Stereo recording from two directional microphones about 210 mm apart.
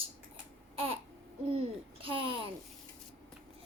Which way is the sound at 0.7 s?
25° right (ahead or behind).